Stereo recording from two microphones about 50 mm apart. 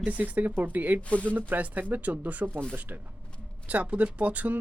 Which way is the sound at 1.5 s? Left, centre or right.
Right.